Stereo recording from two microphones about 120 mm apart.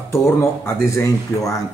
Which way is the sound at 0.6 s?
25° left (ahead or behind).